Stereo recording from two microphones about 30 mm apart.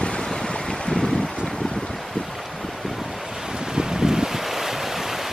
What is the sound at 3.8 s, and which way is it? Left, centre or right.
Wind, right.